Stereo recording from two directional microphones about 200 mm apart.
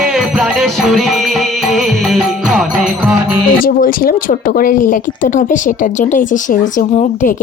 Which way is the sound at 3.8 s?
45° left (ahead or behind).